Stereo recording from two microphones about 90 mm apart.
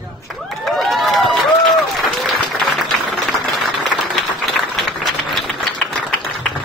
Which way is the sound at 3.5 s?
Centre (ahead or behind).